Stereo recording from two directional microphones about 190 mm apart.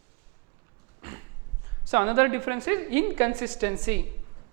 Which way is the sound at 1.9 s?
15° right (ahead or behind).